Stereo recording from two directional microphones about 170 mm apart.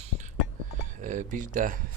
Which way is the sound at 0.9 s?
50° right (ahead or behind).